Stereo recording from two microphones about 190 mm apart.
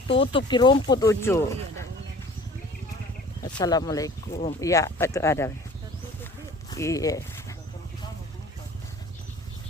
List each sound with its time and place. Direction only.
0.1 s speech: 25° left (ahead or behind)
3.4 s speech: 20° left (ahead or behind)
4.3 s speech: 35° left (ahead or behind)
4.6 s speech: 15° left (ahead or behind)
6.7 s speech: 15° left (ahead or behind)